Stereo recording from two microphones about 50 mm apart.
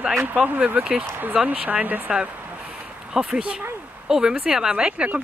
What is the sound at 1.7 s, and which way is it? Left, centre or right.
Speech, right.